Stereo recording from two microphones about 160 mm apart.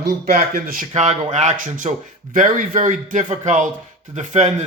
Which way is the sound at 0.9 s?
45° right (ahead or behind).